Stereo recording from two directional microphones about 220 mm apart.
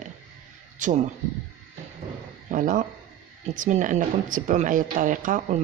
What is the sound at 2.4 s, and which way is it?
Speech, 35° right (ahead or behind).